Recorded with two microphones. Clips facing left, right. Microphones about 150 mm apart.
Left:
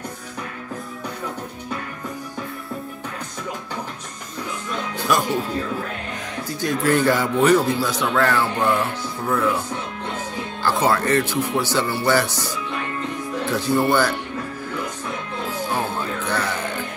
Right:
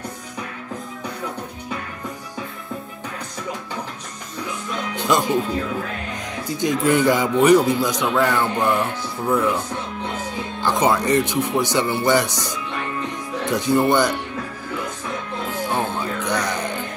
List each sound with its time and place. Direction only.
4.9 s music: 20° right (ahead or behind)
6.6 s speech: 20° right (ahead or behind)
10.6 s speech: 20° right (ahead or behind)
15.7 s music: 20° right (ahead or behind)